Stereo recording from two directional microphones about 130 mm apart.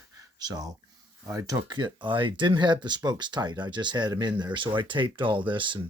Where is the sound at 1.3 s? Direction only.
25° right (ahead or behind).